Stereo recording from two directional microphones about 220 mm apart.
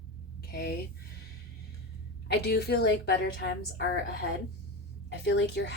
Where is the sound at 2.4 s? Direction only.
45° left (ahead or behind).